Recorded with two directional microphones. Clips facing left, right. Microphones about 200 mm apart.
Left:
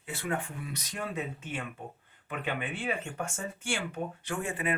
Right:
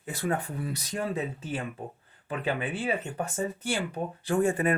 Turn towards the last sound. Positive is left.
turn(degrees=-40)  # may be behind; listen again after turning